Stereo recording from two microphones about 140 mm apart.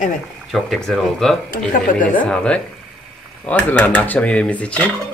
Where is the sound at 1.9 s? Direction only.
70° left (ahead or behind).